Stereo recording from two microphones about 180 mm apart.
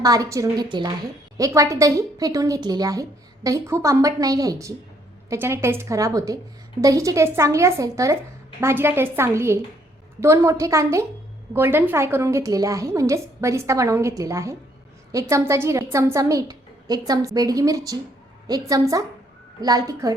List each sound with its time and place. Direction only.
0.0 s a woman's voice: 20° right (ahead or behind)